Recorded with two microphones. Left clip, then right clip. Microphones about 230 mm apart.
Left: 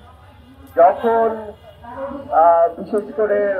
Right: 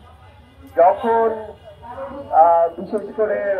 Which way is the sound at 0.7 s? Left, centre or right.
Left.